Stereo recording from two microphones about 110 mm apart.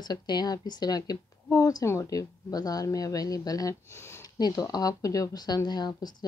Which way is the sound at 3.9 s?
20° left (ahead or behind).